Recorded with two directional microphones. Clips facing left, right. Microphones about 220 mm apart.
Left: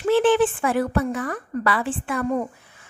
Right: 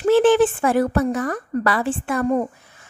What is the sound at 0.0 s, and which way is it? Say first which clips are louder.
A woman's voice: right 3 dB; 45° right (ahead or behind).